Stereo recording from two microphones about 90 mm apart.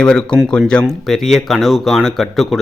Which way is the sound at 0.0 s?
10° left (ahead or behind).